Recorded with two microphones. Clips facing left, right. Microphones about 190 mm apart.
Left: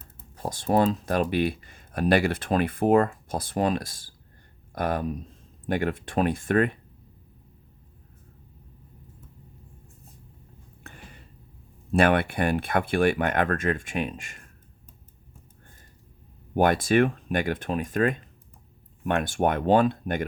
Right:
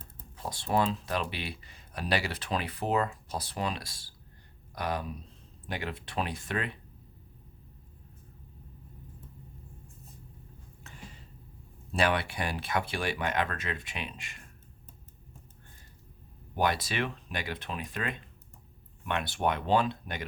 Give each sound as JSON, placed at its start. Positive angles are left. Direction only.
{"t": 0.3, "sound": "speech", "side_deg": 45}
{"t": 10.8, "sound": "a sound", "side_deg": 55}
{"t": 11.9, "sound": "speech", "side_deg": 55}
{"t": 16.6, "sound": "speech", "side_deg": 50}